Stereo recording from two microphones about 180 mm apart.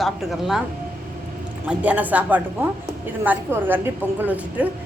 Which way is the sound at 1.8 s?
10° right (ahead or behind).